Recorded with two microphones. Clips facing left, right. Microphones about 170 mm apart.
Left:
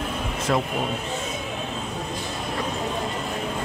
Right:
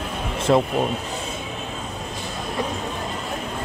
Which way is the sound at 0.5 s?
25° right (ahead or behind).